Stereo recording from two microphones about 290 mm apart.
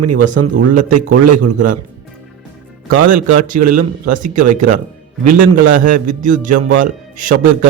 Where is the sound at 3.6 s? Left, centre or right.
Right.